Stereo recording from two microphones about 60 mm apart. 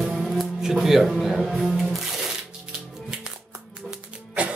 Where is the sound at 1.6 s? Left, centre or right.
Centre.